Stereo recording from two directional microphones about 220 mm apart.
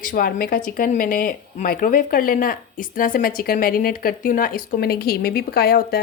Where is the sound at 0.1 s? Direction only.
40° left (ahead or behind).